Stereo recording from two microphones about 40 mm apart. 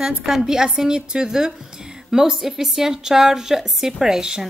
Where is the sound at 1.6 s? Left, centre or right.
Centre.